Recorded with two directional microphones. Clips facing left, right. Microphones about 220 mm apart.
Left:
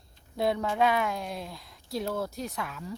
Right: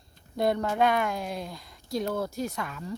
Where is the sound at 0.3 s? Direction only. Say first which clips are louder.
Right 2 dB; centre (ahead or behind).